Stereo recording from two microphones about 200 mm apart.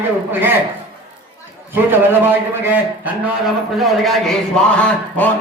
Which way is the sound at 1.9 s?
10° right (ahead or behind).